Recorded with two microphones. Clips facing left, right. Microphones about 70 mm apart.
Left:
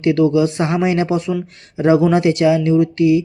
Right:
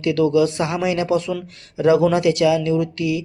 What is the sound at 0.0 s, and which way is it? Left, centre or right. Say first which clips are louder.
A man's voice: left 3 dB; left.